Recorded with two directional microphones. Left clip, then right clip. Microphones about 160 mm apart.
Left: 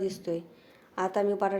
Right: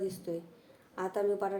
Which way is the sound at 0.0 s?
35° left (ahead or behind).